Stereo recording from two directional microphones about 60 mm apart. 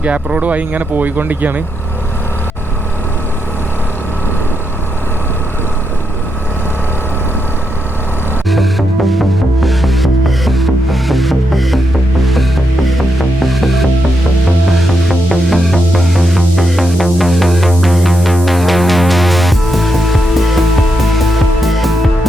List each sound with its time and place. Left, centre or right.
0.0 s speech: right
8.4 s music: centre
15.0 s music: centre